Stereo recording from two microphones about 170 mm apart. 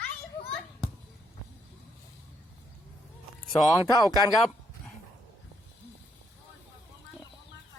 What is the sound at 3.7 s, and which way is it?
Speech, 20° left (ahead or behind).